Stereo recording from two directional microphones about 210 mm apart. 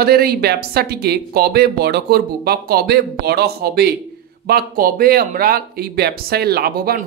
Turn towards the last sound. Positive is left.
turn(degrees=-45)  # may be behind; listen again after turning